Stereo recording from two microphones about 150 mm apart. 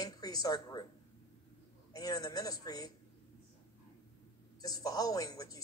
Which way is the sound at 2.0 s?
25° left (ahead or behind).